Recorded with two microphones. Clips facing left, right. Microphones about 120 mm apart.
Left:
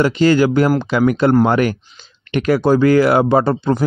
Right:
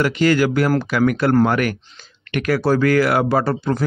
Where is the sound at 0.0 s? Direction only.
25° left (ahead or behind).